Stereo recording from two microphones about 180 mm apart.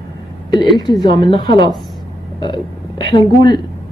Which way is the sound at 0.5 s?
20° left (ahead or behind).